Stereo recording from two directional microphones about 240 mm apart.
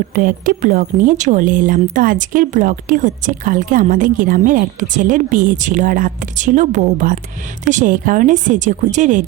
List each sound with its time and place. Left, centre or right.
0.1 s speech: right